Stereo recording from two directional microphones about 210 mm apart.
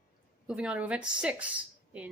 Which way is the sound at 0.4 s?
5° right (ahead or behind).